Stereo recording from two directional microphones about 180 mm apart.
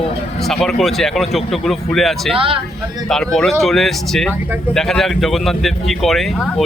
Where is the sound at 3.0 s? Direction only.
Centre (ahead or behind).